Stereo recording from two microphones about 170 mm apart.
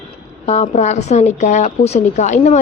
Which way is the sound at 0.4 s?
40° left (ahead or behind).